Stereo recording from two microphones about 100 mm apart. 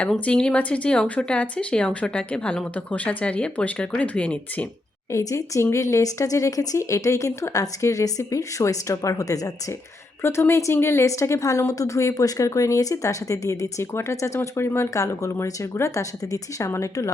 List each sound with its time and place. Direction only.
0.0 s speech: 10° left (ahead or behind)
5.1 s speech: 30° left (ahead or behind)
10.2 s speech: 25° left (ahead or behind)